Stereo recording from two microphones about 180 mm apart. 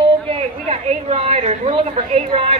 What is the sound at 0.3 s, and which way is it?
A woman's voice, 35° right (ahead or behind).